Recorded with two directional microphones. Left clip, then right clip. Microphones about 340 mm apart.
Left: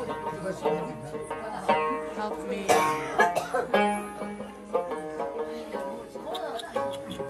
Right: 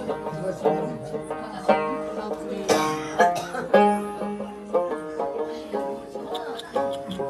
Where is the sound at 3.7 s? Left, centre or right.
Right.